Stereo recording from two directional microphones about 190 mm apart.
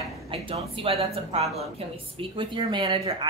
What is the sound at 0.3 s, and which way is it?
A woman's voice, 30° right (ahead or behind).